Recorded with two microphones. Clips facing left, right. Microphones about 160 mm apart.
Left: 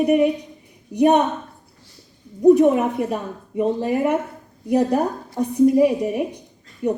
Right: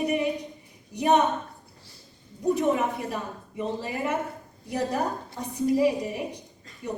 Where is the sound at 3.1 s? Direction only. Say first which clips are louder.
Left 7 dB; 55° left (ahead or behind).